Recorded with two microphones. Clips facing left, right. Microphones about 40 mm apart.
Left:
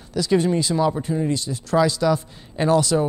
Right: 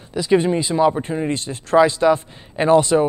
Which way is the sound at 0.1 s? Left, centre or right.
Right.